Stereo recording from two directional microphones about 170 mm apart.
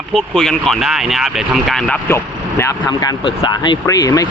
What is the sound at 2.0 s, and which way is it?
Speech, 15° left (ahead or behind).